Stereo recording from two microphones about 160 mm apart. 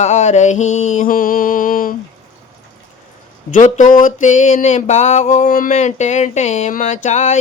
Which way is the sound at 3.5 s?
50° left (ahead or behind).